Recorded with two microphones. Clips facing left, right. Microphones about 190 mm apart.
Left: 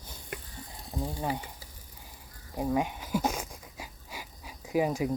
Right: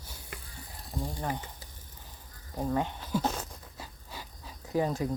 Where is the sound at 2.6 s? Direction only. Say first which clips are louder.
Left 2 dB; 10° left (ahead or behind).